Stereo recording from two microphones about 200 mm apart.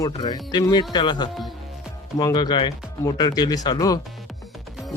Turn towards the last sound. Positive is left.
turn(degrees=20)  # may be behind; listen again after turning